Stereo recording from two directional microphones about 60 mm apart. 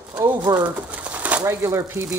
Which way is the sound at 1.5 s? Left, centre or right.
Right.